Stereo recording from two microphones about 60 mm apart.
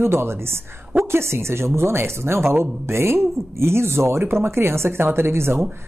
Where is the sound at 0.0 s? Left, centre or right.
Right.